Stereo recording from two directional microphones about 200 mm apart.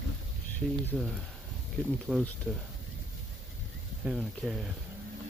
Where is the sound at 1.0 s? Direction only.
Centre (ahead or behind).